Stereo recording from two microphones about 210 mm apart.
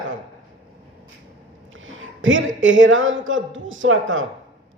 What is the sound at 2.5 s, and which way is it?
A man's voice, 65° right (ahead or behind).